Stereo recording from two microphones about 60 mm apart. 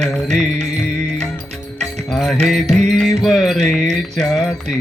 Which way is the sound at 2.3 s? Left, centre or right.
Centre.